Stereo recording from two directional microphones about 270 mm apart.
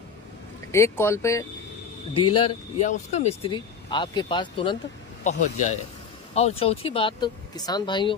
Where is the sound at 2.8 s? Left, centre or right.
Left.